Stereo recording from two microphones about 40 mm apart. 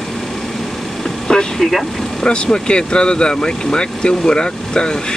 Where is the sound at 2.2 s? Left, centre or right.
Left.